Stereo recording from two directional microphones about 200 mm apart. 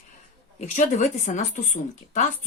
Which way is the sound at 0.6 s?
40° left (ahead or behind).